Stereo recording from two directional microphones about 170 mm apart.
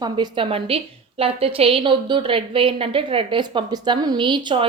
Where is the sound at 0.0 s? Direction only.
25° right (ahead or behind).